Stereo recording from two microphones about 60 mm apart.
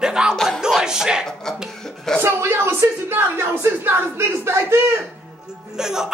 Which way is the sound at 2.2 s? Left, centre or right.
Right.